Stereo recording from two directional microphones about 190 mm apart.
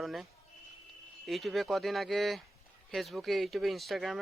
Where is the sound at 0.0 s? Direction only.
Centre (ahead or behind).